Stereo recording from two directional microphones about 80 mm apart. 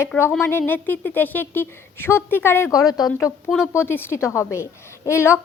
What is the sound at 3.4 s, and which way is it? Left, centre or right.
Speech, centre.